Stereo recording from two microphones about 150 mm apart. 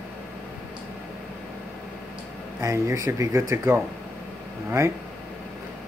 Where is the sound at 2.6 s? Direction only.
20° right (ahead or behind).